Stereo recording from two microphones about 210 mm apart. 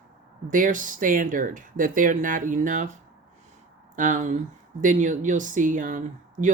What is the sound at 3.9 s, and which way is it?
Speech, 40° right (ahead or behind).